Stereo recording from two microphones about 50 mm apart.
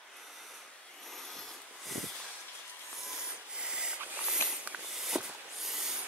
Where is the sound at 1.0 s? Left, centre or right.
Centre.